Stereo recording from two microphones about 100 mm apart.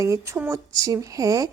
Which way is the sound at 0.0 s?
30° right (ahead or behind).